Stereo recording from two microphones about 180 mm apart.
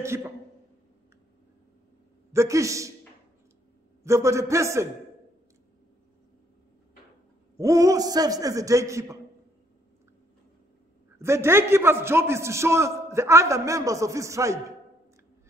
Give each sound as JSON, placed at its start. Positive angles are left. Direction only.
{"t": 0.0, "sound": "a man's voice", "side_deg": -15}
{"t": 2.3, "sound": "a man's voice", "side_deg": -15}
{"t": 4.0, "sound": "a man's voice", "side_deg": -15}
{"t": 7.5, "sound": "a man's voice", "side_deg": -15}
{"t": 11.1, "sound": "a man's voice", "side_deg": -15}